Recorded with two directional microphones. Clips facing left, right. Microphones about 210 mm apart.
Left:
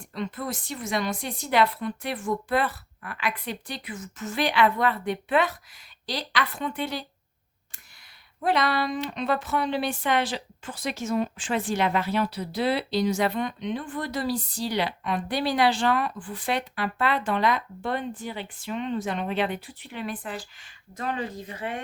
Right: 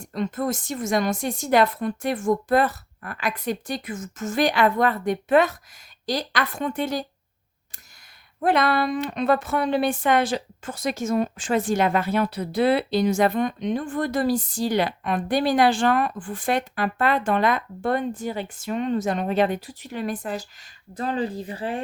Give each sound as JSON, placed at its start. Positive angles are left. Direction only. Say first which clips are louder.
{"t": 0.0, "sound": "speech", "louder": "right 6 dB", "side_deg": -45}
{"t": 8.4, "sound": "speech", "louder": "right 4 dB", "side_deg": -50}